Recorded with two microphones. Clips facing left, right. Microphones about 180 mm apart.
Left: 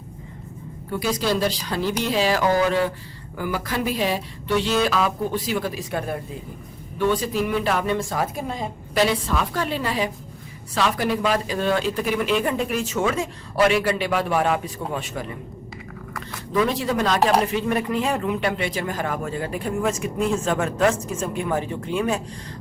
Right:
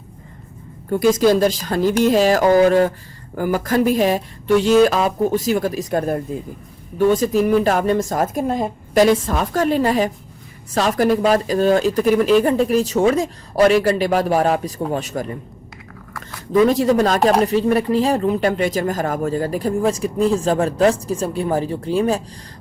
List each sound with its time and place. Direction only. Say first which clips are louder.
0.9 s a woman's voice: right 9 dB; 45° right (ahead or behind)
16.5 s a woman's voice: right 8 dB; 45° right (ahead or behind)